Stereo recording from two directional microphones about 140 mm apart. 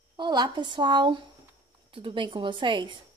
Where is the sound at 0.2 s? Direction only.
30° right (ahead or behind).